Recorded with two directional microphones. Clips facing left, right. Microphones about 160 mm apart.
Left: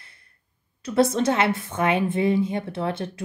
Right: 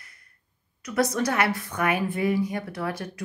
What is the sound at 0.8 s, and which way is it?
A woman's voice, 25° left (ahead or behind).